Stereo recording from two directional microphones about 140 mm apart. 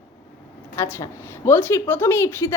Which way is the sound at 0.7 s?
20° left (ahead or behind).